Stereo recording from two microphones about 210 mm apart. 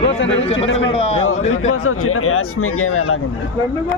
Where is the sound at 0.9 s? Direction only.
30° left (ahead or behind).